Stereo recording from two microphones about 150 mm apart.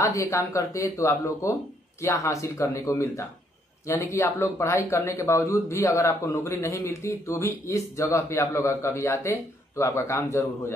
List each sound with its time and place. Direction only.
0.0 s speech: 20° left (ahead or behind)